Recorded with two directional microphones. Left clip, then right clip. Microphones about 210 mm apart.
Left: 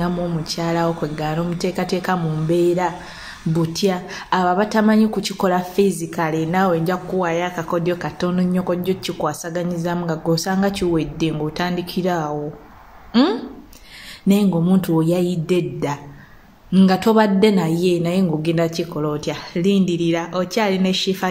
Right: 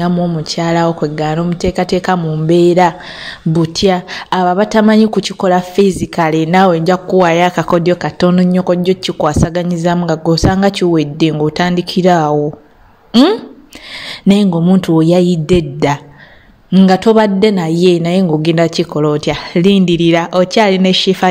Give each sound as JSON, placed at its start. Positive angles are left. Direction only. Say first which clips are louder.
{"t": 0.0, "sound": "a woman's voice", "louder": "right 7 dB", "side_deg": -30}